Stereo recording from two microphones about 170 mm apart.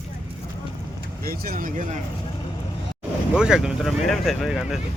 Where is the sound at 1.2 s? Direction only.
60° right (ahead or behind).